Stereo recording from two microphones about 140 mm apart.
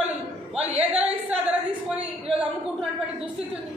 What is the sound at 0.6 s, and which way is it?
Speech, 50° right (ahead or behind).